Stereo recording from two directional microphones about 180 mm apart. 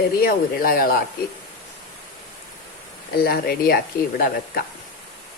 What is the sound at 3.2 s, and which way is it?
Speech, 60° left (ahead or behind).